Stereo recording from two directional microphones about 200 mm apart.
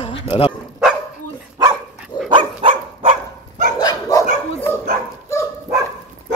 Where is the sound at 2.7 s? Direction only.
35° right (ahead or behind).